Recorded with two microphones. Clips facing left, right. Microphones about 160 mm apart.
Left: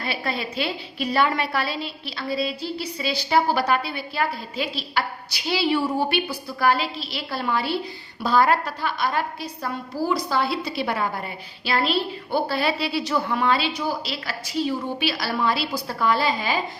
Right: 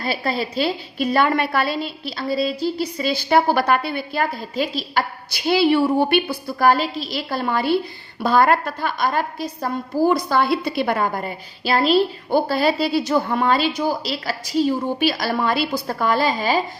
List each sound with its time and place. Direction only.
0.0 s a woman's voice: 35° right (ahead or behind)